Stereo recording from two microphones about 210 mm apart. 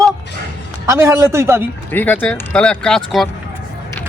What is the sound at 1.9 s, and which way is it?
Speech, 10° left (ahead or behind).